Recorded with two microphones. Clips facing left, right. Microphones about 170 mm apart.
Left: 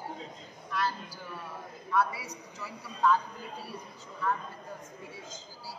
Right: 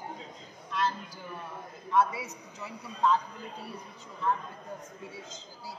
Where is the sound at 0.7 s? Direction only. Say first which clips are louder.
Right 1 dB; 20° right (ahead or behind).